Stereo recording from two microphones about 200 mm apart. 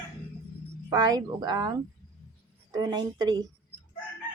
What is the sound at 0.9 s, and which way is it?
A woman's voice, 20° right (ahead or behind).